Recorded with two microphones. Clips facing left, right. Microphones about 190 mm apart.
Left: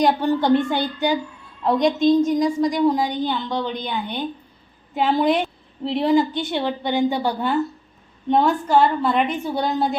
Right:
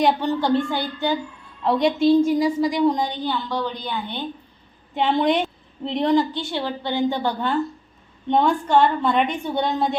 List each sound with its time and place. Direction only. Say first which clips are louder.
0.2 s a woman's voice: left 3 dB; 15° left (ahead or behind)
1.6 s a woman's voice: left 1 dB; centre (ahead or behind); by 4.3 s 15° left (ahead or behind)
4.9 s a woman's voice: left 1 dB; 5° left (ahead or behind)
6.3 s a woman's voice: left 3 dB; 20° left (ahead or behind); by 10.0 s centre (ahead or behind)